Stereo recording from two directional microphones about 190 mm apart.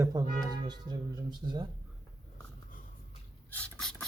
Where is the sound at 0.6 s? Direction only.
20° right (ahead or behind).